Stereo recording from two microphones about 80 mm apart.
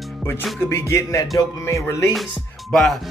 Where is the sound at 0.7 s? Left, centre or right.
Left.